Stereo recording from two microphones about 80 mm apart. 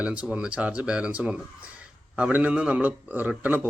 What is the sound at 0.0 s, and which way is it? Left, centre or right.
Speech, centre.